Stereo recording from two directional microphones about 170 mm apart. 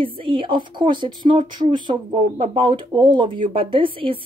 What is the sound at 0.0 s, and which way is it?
Speech, 30° right (ahead or behind).